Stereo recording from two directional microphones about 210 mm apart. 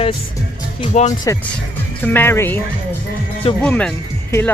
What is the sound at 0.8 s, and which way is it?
Speech, 35° left (ahead or behind).